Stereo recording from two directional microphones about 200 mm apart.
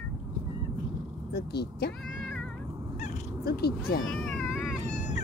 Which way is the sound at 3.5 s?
50° left (ahead or behind).